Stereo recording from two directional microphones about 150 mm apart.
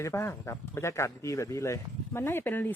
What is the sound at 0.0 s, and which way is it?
A man's voice, 15° left (ahead or behind).